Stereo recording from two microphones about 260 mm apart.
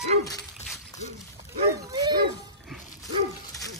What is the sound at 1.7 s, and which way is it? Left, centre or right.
Dog, centre.